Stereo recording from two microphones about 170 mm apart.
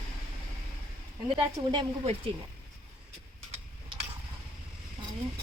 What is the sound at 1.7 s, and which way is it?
Speech, 35° right (ahead or behind).